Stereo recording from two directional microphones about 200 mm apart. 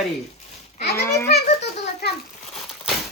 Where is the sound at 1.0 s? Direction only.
10° left (ahead or behind).